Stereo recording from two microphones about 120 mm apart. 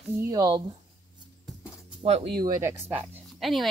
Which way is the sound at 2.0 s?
60° right (ahead or behind).